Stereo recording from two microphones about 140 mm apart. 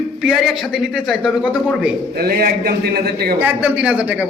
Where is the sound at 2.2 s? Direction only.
90° right.